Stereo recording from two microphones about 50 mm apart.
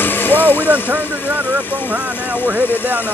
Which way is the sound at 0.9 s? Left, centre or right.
Left.